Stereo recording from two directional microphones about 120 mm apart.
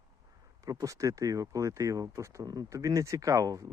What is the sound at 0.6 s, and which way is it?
Speech, 30° right (ahead or behind).